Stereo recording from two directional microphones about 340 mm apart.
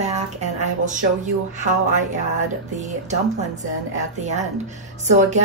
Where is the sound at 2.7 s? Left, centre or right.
Right.